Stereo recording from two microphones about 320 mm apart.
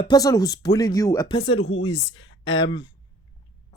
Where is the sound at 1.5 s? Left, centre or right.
Left.